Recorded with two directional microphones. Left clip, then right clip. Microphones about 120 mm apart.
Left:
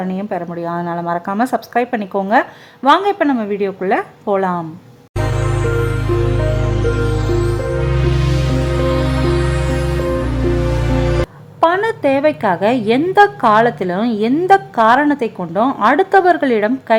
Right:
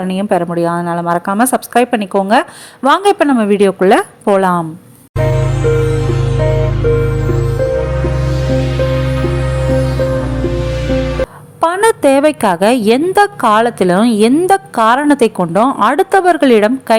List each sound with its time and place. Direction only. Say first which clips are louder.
0.0 s a woman's voice: right 7 dB; 35° right (ahead or behind)
0.8 s a woman's voice: right 5 dB; 25° right (ahead or behind); by 4.0 s 45° right (ahead or behind)
4.3 s a woman's voice: right 5 dB; 35° right (ahead or behind)
5.1 s music: right 4 dB; centre (ahead or behind)
11.6 s a woman's voice: right 3 dB; 45° right (ahead or behind)
13.1 s speech: even; 30° right (ahead or behind)
13.5 s a woman's voice: right 2 dB; 40° right (ahead or behind)
16.1 s speech: right 3 dB; 25° right (ahead or behind)